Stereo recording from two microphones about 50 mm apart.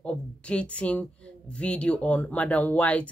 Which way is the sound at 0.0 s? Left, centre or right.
Left.